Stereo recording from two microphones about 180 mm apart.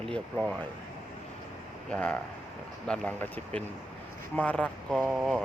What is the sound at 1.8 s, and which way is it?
Speech, 10° left (ahead or behind).